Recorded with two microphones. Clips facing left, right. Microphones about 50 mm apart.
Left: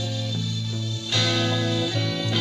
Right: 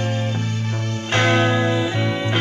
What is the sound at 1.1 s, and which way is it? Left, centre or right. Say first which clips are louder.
Music: right 7 dB; right.